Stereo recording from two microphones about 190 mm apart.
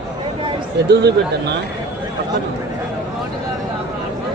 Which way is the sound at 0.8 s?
60° right (ahead or behind).